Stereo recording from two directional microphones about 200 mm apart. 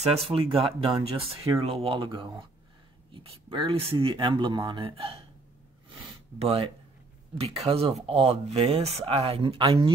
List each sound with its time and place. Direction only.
0.0 s speech: 30° right (ahead or behind)
6.4 s speech: 30° right (ahead or behind)